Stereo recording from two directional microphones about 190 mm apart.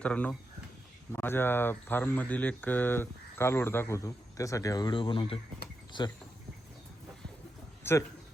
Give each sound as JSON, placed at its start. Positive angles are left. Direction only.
{"t": 0.0, "sound": "speech", "side_deg": 5}
{"t": 7.9, "sound": "speech", "side_deg": 10}